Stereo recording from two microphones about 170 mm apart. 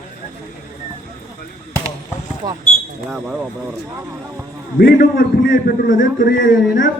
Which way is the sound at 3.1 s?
5° right (ahead or behind).